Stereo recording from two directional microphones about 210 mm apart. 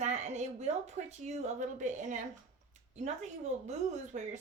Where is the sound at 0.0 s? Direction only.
35° right (ahead or behind).